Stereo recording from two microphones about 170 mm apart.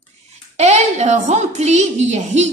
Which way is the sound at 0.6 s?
40° right (ahead or behind).